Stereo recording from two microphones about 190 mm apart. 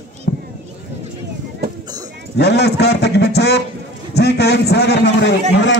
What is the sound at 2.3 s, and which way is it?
A man's voice, 60° left (ahead or behind).